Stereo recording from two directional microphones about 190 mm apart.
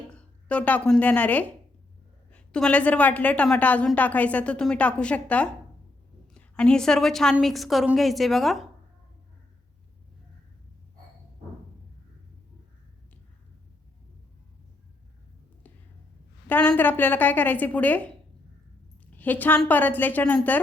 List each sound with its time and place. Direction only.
0.1 s a woman's voice: 5° left (ahead or behind)
16.5 s a woman's voice: 10° left (ahead or behind)
19.1 s a woman's voice: 10° left (ahead or behind)